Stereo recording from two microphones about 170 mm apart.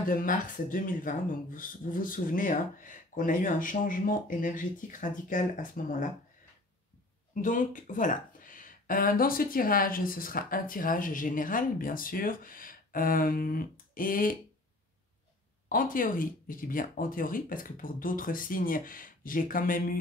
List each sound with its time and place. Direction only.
0.0 s speech: 55° left (ahead or behind)
7.4 s speech: 50° left (ahead or behind)
15.7 s speech: 55° left (ahead or behind)